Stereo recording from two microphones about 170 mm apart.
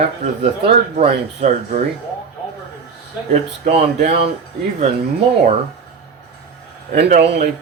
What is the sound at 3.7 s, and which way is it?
Speech, 35° right (ahead or behind).